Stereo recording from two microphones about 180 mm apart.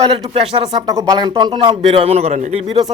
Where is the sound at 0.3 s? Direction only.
30° right (ahead or behind).